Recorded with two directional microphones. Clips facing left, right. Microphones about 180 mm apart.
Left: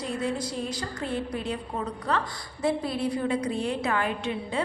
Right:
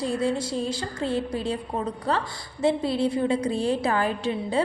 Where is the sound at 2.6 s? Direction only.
25° right (ahead or behind).